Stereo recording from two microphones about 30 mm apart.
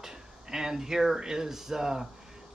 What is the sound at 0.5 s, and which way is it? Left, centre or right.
Speech, right.